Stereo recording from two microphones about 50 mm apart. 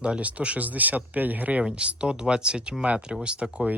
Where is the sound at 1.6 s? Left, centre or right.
Right.